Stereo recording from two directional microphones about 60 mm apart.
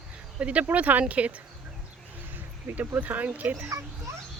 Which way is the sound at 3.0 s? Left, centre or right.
Right.